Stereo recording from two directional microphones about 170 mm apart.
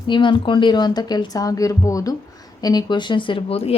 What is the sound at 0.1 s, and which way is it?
A woman's voice, 30° left (ahead or behind).